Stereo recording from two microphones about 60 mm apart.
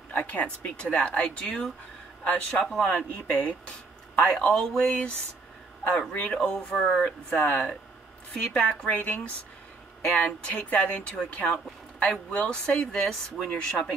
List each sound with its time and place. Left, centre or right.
0.1 s speech: left
10.4 s speech: centre